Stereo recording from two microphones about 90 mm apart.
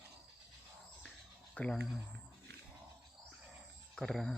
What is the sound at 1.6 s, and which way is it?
Speech, 15° left (ahead or behind).